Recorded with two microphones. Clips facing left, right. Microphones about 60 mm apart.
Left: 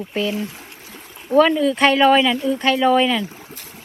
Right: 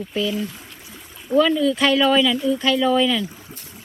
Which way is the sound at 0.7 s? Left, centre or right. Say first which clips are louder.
Left 1 dB; left.